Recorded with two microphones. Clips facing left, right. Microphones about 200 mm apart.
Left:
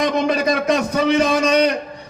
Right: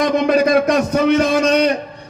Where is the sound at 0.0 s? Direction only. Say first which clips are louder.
Right 4 dB; 55° right (ahead or behind).